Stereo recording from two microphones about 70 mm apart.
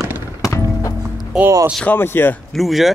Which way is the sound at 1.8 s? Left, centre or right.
Left.